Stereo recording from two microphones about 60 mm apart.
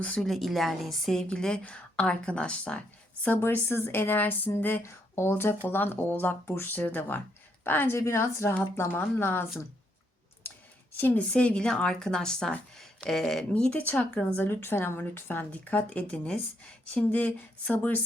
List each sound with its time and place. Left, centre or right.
0.2 s a woman's voice: centre; by 2.8 s left
3.2 s a woman's voice: left
4.8 s speech: left
5.3 s a woman's voice: left
7.9 s a woman's voice: left
8.9 s a woman's voice: left
10.9 s a woman's voice: left
11.2 s a woman's voice: left; by 13.4 s centre
13.5 s a sound: centre
13.8 s a sound: left
14.1 s a sound: centre
14.4 s a woman's voice: left; by 16.4 s centre
16.8 s a sound: left